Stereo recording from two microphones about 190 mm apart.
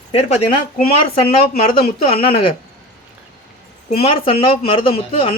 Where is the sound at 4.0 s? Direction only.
30° left (ahead or behind).